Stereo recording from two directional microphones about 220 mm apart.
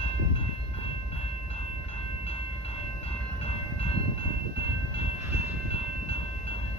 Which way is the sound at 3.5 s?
25° left (ahead or behind).